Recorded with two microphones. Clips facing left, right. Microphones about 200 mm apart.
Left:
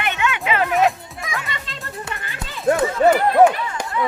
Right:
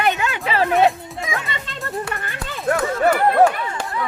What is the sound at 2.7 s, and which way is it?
Chatter, 20° left (ahead or behind).